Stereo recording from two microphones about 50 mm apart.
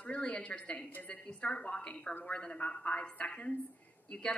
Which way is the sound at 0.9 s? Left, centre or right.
Left.